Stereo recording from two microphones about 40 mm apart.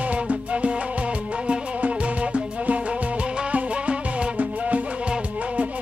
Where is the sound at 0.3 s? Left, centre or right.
Right.